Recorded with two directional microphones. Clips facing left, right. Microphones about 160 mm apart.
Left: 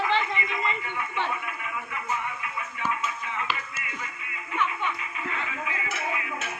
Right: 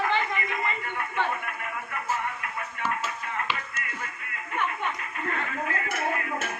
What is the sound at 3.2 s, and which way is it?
Music, 50° right (ahead or behind).